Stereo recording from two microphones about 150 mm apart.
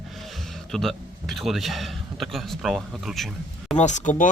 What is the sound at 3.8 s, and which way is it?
Speech, 55° left (ahead or behind).